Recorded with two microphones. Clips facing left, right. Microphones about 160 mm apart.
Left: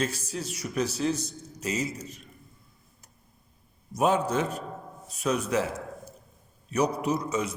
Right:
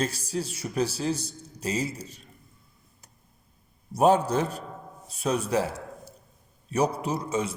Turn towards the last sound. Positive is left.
turn(degrees=-30)  # may be behind; listen again after turning